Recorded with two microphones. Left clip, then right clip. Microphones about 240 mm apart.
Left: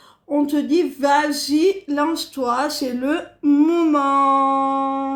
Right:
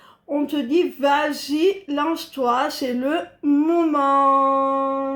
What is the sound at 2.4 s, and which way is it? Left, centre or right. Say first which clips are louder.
Speech: right 1 dB; left.